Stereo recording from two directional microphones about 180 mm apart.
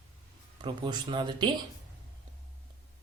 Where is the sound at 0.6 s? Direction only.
25° right (ahead or behind).